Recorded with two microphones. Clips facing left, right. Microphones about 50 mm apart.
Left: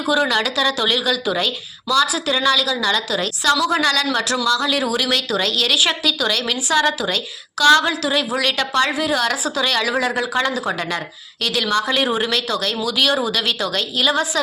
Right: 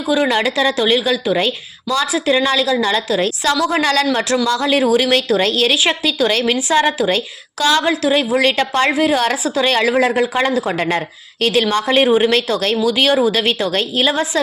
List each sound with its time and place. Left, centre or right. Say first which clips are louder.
0.1 s a woman's voice: right 3 dB; right
4.4 s a woman's voice: right 5 dB; right
12.0 s a woman's voice: right 7 dB; right
12.3 s a woman's voice: right 5 dB; right